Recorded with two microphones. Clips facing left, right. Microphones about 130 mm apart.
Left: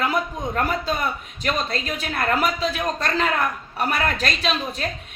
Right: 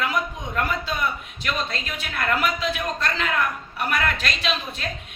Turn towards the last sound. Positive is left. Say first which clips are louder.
# left 3 dB
turn(degrees=40)  # may be behind; listen again after turning